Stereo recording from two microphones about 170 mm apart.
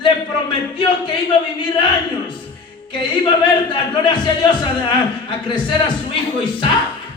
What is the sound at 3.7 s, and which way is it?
A man's voice, 25° left (ahead or behind).